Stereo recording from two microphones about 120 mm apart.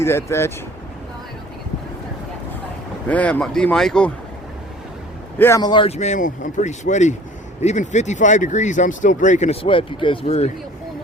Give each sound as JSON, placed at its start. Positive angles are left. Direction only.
{"t": 0.0, "sound": "speech", "side_deg": 20}
{"t": 3.1, "sound": "speech", "side_deg": 10}
{"t": 5.5, "sound": "speech", "side_deg": 35}
{"t": 5.9, "sound": "speech", "side_deg": 75}
{"t": 7.6, "sound": "speech", "side_deg": 75}
{"t": 9.6, "sound": "speech", "side_deg": 45}